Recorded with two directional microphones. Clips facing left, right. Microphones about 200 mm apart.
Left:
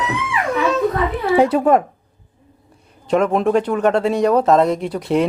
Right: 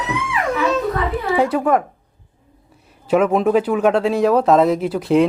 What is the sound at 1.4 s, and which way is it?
Speech, 25° left (ahead or behind).